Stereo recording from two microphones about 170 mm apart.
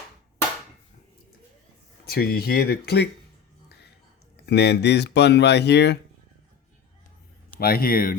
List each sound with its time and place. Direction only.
2.0 s speech: 70° left (ahead or behind)
4.4 s speech: 80° left
7.6 s speech: 60° left (ahead or behind)